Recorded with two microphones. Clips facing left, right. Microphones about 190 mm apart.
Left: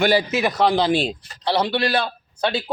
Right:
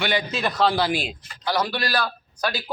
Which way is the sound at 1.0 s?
35° left (ahead or behind).